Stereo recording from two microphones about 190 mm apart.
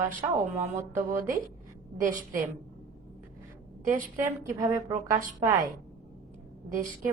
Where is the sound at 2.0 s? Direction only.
45° right (ahead or behind).